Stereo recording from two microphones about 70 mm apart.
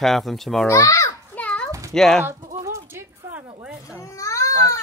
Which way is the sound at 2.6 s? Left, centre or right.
Right.